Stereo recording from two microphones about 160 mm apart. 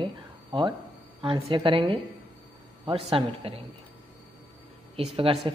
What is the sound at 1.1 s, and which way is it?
Speech, 30° right (ahead or behind).